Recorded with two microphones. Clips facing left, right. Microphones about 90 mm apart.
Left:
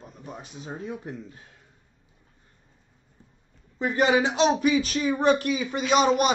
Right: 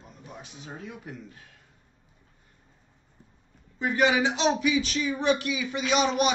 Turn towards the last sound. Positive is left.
turn(degrees=40)  # may be behind; listen again after turning